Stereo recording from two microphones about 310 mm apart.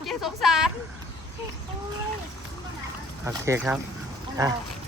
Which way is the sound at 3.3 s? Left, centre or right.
Centre.